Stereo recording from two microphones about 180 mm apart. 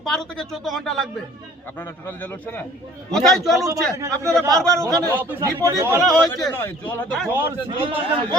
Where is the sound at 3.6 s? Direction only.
20° right (ahead or behind).